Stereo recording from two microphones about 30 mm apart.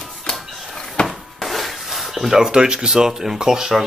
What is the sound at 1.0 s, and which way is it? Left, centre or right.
Rub, left.